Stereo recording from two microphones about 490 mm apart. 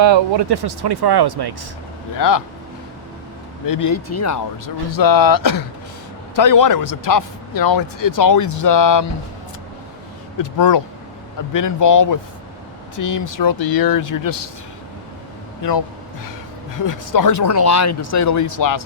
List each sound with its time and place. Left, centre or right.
0.0 s speech: right
2.1 s speech: left
3.7 s speech: left
10.4 s speech: left
16.7 s speech: left